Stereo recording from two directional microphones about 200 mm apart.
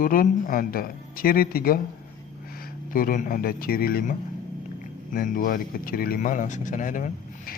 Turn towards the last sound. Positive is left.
turn(degrees=40)  # may be behind; listen again after turning